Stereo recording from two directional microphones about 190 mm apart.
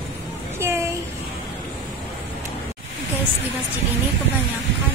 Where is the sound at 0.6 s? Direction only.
15° right (ahead or behind).